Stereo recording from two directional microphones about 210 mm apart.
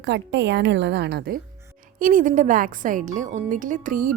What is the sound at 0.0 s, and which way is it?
A woman's voice, 55° right (ahead or behind).